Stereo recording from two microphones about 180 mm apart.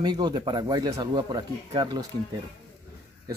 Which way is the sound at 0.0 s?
25° right (ahead or behind).